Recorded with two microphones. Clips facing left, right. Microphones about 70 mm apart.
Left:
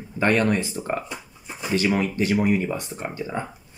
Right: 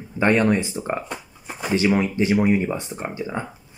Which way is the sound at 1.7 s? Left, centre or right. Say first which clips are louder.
Right 2 dB; right.